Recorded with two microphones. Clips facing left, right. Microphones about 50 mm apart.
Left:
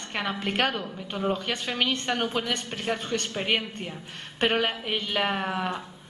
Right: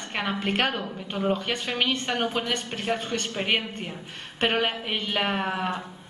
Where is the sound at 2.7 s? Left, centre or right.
Right.